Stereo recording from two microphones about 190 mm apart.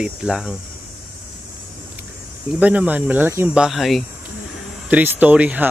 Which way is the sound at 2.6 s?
5° right (ahead or behind).